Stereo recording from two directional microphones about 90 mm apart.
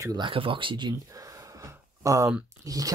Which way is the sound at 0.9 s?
40° right (ahead or behind).